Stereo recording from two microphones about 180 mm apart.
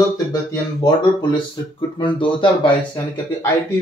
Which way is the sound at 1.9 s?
25° left (ahead or behind).